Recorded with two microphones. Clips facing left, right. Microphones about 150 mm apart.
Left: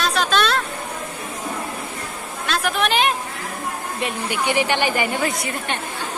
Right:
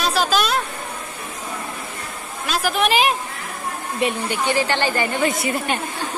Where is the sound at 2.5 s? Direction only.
Centre (ahead or behind).